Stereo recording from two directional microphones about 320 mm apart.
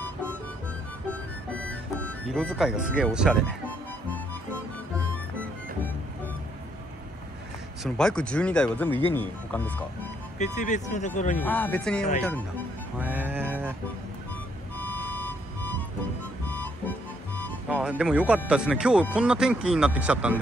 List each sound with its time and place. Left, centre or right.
1.7 s speech: centre
7.8 s speech: centre
10.4 s speech: left
11.3 s speech: centre
13.0 s music: centre
14.8 s music: centre
18.4 s speech: centre